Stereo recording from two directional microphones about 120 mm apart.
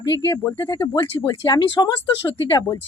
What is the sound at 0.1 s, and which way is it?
A woman's voice, 30° left (ahead or behind).